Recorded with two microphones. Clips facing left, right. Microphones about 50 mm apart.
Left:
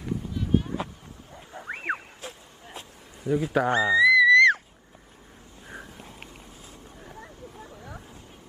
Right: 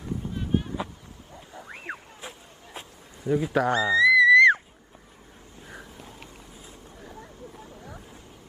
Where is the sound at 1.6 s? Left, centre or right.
Left.